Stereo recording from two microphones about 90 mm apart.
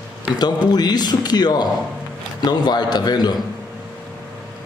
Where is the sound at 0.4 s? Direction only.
50° left (ahead or behind).